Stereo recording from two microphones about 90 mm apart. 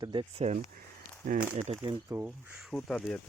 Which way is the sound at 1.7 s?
90° right.